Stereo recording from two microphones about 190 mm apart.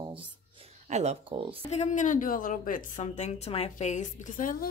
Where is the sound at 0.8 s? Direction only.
35° right (ahead or behind).